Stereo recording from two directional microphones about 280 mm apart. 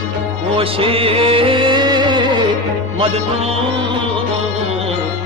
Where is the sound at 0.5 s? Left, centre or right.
Centre.